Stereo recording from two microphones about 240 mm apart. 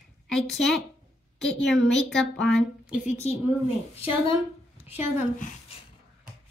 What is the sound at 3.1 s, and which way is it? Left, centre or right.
Speech, left.